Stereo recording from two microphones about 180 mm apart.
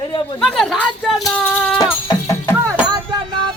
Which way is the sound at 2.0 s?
15° left (ahead or behind).